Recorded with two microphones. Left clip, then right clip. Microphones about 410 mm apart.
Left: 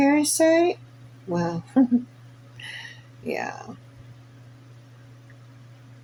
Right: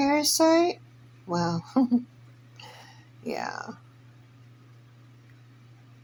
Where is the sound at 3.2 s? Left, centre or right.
Right.